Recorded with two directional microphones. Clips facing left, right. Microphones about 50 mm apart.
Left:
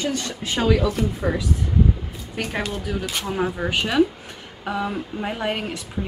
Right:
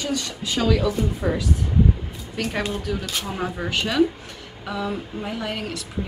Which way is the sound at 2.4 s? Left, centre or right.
Centre.